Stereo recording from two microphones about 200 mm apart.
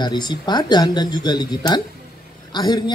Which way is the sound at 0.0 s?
20° left (ahead or behind).